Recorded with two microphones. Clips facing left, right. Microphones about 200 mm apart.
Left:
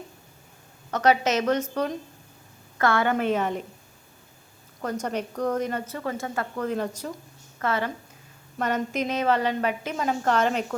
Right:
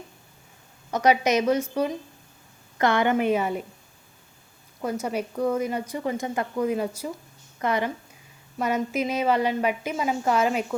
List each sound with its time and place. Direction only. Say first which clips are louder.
0.9 s a woman's voice: right 1 dB; 10° right (ahead or behind)
4.8 s a woman's voice: right 1 dB; 10° right (ahead or behind)